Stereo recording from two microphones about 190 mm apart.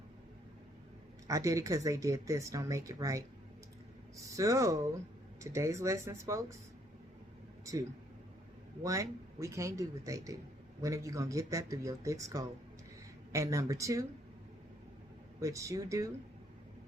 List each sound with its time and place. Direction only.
1.3 s speech: 15° right (ahead or behind)
4.4 s speech: 15° right (ahead or behind)
7.6 s a sound: 15° right (ahead or behind)
8.8 s speech: 15° right (ahead or behind)
15.4 s speech: 15° right (ahead or behind)